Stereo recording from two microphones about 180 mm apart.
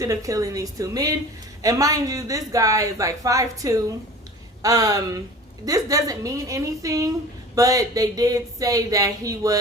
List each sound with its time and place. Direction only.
0.0 s a woman's voice: 20° right (ahead or behind)